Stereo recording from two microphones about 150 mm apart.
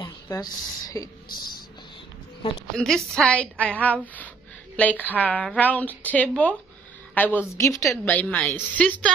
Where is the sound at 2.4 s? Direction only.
35° left (ahead or behind).